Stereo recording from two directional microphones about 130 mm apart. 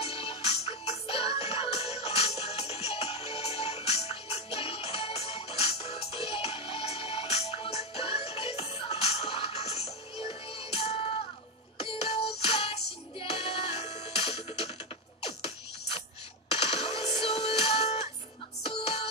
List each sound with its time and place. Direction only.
0.0 s music: 45° left (ahead or behind)